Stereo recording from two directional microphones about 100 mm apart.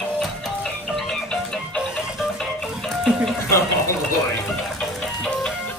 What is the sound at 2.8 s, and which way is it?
Music, centre (ahead or behind).